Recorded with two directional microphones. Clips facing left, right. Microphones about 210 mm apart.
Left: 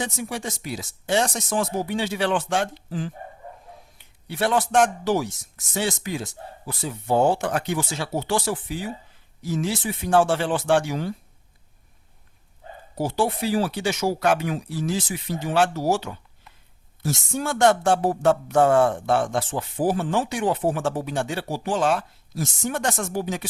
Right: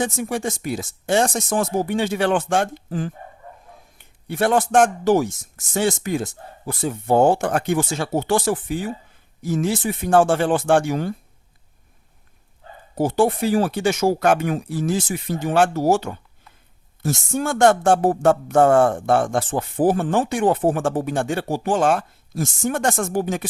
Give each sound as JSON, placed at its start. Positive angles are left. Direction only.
{"t": 0.0, "sound": "speech", "side_deg": -50}
{"t": 13.0, "sound": "speech", "side_deg": -50}